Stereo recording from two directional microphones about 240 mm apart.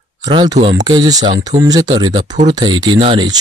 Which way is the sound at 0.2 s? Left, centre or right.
Centre.